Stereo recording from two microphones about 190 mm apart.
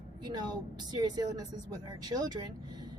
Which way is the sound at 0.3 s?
20° right (ahead or behind).